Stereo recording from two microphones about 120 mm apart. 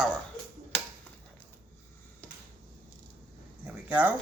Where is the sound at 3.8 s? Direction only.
10° right (ahead or behind).